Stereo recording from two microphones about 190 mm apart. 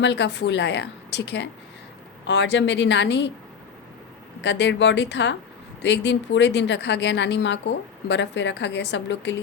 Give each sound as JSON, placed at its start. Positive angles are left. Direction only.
{"t": 0.0, "sound": "a woman's voice", "side_deg": 65}
{"t": 4.4, "sound": "a woman's voice", "side_deg": 65}